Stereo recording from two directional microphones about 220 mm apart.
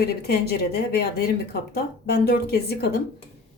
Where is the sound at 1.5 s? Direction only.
45° left (ahead or behind).